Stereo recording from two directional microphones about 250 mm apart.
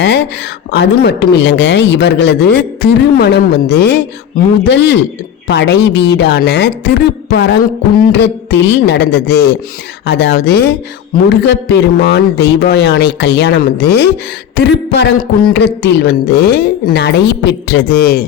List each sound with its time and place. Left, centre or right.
0.7 s a woman's voice: left